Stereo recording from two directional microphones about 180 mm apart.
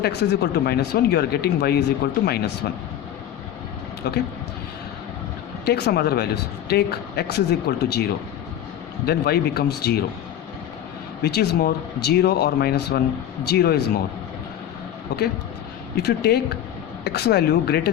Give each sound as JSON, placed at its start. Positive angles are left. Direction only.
{"t": 0.0, "sound": "speech", "side_deg": 65}
{"t": 4.0, "sound": "speech", "side_deg": 60}
{"t": 5.6, "sound": "speech", "side_deg": 65}
{"t": 9.0, "sound": "speech", "side_deg": 60}
{"t": 11.2, "sound": "speech", "side_deg": 65}
{"t": 15.1, "sound": "speech", "side_deg": 65}